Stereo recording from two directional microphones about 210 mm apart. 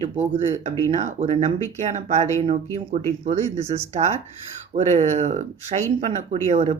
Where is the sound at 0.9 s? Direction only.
35° right (ahead or behind).